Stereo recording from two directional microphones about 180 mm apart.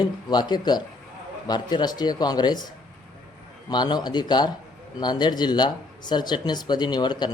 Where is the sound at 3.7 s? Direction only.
25° left (ahead or behind).